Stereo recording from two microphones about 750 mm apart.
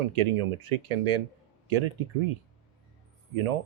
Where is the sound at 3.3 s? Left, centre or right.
Right.